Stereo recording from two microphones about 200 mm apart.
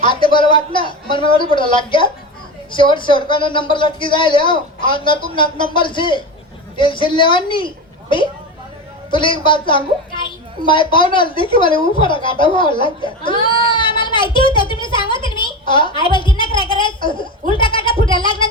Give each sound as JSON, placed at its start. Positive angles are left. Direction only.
{"t": 0.0, "sound": "a man's voice", "side_deg": 25}
{"t": 9.0, "sound": "a woman's voice", "side_deg": 25}